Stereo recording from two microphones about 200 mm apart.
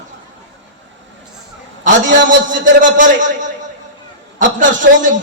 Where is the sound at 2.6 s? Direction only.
40° right (ahead or behind).